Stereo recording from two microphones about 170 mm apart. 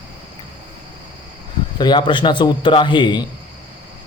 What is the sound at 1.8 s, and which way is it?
A man's voice, 25° left (ahead or behind).